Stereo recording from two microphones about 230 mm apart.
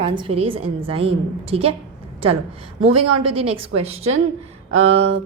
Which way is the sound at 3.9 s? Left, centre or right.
Right.